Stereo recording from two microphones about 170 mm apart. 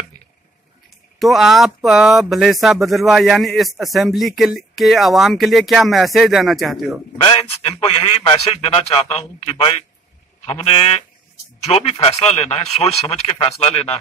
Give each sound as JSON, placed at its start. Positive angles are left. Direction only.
{"t": 1.2, "sound": "speech", "side_deg": 0}
{"t": 7.1, "sound": "speech", "side_deg": 35}